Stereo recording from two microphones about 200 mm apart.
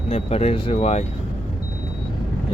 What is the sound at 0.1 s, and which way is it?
Speech, 30° left (ahead or behind).